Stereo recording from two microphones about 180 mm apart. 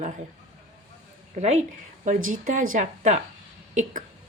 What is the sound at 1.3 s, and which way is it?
A woman's voice, 40° right (ahead or behind).